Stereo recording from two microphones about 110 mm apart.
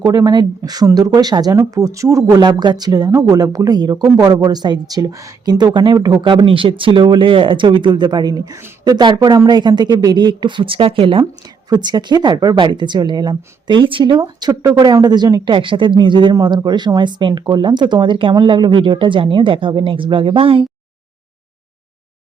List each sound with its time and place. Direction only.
0.0 s speech: 35° right (ahead or behind)
2.4 s speech: 45° right (ahead or behind)
6.2 s speech: 50° right (ahead or behind)
11.7 s speech: 40° right (ahead or behind)
16.3 s speech: 35° right (ahead or behind); by 20.7 s 55° right (ahead or behind)